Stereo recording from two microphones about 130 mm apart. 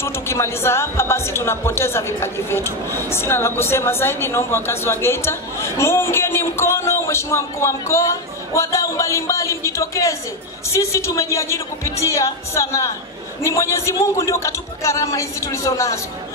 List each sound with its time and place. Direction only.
0.0 s speech: 20° left (ahead or behind)